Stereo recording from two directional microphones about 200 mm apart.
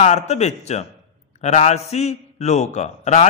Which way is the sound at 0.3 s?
35° left (ahead or behind).